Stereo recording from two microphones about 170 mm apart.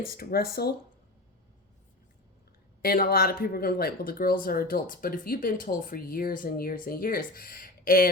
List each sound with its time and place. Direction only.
0.0 s speech: 60° left (ahead or behind)
2.8 s speech: 60° left (ahead or behind)